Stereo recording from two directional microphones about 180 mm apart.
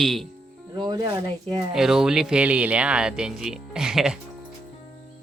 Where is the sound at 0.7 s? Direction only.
25° right (ahead or behind).